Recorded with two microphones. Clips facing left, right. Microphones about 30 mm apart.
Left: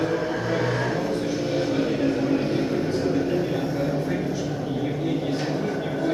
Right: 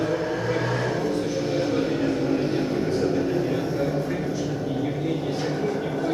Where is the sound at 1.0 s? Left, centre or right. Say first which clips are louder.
Even; left.